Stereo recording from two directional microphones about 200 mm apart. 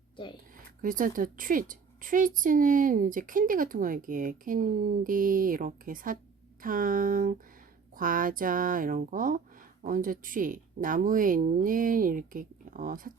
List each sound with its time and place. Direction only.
0.8 s a woman's voice: 45° right (ahead or behind)